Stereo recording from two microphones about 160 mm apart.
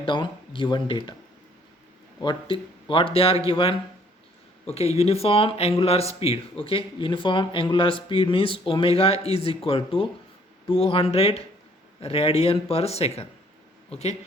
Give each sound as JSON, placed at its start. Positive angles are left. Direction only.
{"t": 0.0, "sound": "speech", "side_deg": 30}
{"t": 2.2, "sound": "speech", "side_deg": 30}